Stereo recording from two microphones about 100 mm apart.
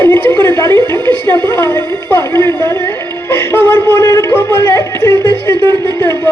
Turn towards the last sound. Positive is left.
turn(degrees=20)  # may be behind; listen again after turning